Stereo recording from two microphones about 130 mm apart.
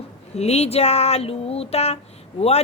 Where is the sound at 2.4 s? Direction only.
55° left (ahead or behind).